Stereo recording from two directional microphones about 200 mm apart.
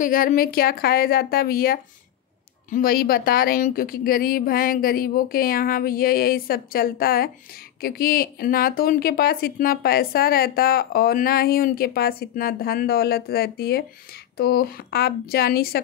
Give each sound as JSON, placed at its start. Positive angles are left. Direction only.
{"t": 0.0, "sound": "a woman's voice", "side_deg": 40}